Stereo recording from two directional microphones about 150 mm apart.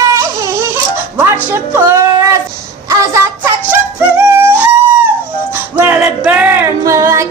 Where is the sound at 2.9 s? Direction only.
20° right (ahead or behind).